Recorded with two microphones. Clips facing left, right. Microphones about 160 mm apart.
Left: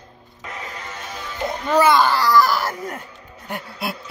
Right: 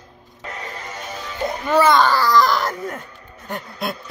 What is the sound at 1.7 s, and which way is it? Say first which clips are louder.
Speech: right 1 dB; 10° left (ahead or behind).